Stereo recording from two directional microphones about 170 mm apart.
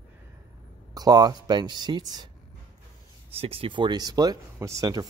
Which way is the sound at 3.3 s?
35° right (ahead or behind).